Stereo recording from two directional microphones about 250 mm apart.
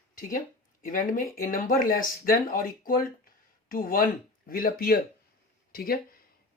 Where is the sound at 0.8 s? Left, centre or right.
Left.